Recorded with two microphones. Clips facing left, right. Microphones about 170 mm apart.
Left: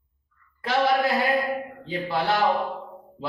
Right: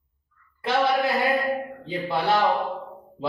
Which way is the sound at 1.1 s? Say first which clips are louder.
Even; centre (ahead or behind).